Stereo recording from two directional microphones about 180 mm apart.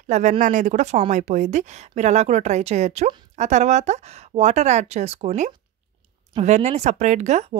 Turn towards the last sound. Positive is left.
turn(degrees=-40)  # may be behind; listen again after turning